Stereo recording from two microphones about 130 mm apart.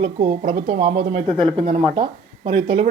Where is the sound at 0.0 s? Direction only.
45° right (ahead or behind).